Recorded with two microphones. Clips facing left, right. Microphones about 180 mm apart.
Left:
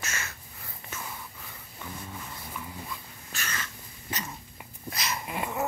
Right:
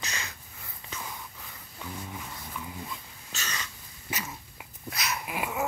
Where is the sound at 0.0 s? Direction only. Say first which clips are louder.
Left 1 dB; 15° right (ahead or behind).